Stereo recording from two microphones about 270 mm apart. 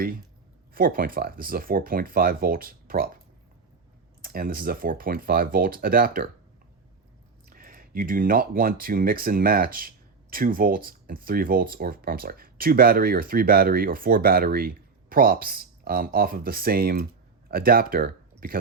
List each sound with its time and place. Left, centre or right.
0.7 s speech: right
4.2 s speech: right
7.5 s speech: right